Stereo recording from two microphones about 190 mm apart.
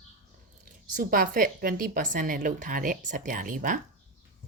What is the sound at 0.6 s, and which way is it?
A woman's voice, 45° right (ahead or behind).